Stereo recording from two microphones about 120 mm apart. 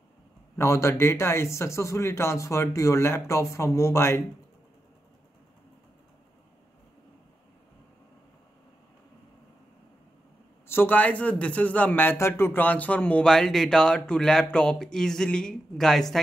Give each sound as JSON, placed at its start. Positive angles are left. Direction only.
{"t": 0.6, "sound": "speech", "side_deg": 25}
{"t": 10.7, "sound": "a man's voice", "side_deg": 15}